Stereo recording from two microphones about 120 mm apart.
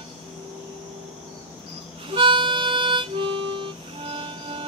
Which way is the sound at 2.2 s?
40° right (ahead or behind).